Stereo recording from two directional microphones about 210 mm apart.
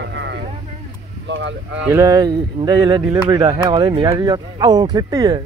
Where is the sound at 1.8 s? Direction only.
15° right (ahead or behind).